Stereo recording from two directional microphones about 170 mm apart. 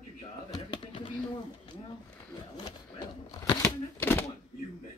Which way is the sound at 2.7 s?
25° left (ahead or behind).